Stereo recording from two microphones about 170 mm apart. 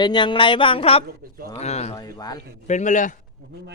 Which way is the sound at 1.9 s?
20° left (ahead or behind).